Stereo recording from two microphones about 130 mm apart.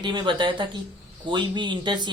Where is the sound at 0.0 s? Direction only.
35° right (ahead or behind).